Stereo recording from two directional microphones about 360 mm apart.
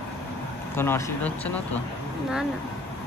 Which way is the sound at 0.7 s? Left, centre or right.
Centre.